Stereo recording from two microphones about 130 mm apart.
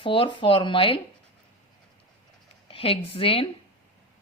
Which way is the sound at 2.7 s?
45° left (ahead or behind).